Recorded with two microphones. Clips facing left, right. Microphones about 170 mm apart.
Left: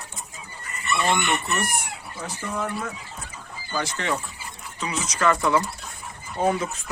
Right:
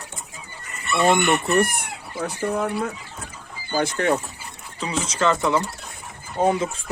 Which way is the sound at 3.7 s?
55° right (ahead or behind).